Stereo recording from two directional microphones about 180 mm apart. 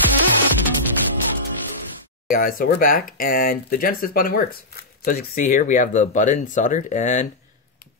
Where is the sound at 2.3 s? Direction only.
50° left (ahead or behind).